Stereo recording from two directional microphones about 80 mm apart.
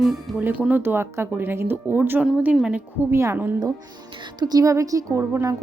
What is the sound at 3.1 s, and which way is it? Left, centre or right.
Speech, right.